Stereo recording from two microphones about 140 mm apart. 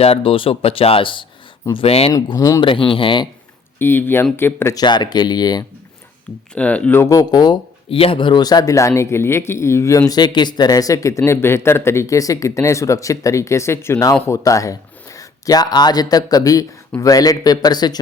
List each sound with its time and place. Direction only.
0.0 s speech: 45° left (ahead or behind)
2.1 s speech: 30° left (ahead or behind)
2.6 s speech: 40° left (ahead or behind)
3.8 s speech: 15° left (ahead or behind)
4.8 s speech: 30° left (ahead or behind)
6.5 s speech: 10° left (ahead or behind)
10.1 s speech: 30° left (ahead or behind)